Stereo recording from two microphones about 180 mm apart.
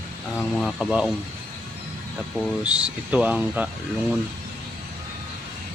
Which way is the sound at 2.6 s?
5° right (ahead or behind).